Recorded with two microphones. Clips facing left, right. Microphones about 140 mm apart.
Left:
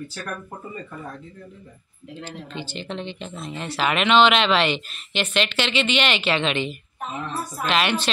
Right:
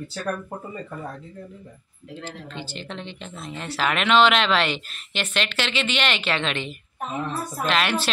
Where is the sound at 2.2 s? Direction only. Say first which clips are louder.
Left 2 dB; centre (ahead or behind).